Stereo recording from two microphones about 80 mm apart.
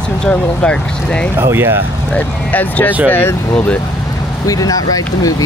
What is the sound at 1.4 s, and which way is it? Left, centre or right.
Speech, right.